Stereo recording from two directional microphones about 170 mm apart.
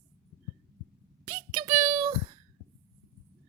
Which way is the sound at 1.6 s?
30° right (ahead or behind).